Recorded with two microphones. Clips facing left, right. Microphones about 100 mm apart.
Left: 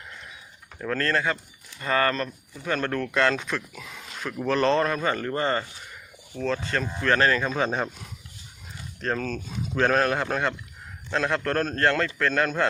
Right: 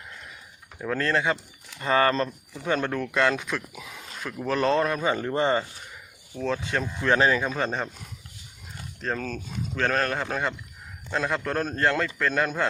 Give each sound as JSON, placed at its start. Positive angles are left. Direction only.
{"t": 0.8, "sound": "speech", "side_deg": -10}
{"t": 2.9, "sound": "speech", "side_deg": -5}
{"t": 7.5, "sound": "a man's voice", "side_deg": 5}
{"t": 9.0, "sound": "a man's voice", "side_deg": 0}